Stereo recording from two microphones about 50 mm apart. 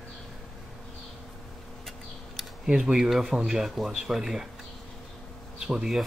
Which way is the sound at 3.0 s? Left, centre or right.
Centre.